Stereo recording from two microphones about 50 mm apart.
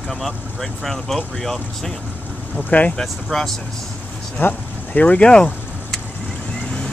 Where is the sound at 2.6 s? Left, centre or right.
Left.